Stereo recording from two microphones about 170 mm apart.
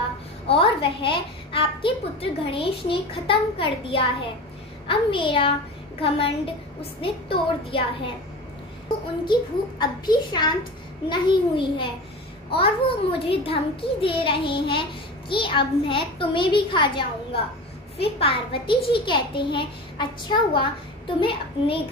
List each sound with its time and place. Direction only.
0.5 s a child's voice: 30° left (ahead or behind)
9.2 s a child's voice: 25° left (ahead or behind)